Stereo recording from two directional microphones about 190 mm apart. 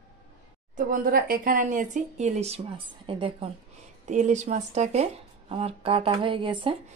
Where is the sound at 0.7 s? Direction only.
45° right (ahead or behind); by 3.4 s 30° right (ahead or behind).